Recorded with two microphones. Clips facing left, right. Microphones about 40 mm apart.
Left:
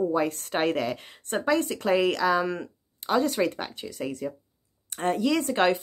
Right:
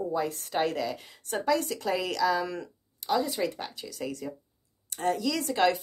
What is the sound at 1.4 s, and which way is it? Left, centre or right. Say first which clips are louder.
Speech: left 2 dB; left.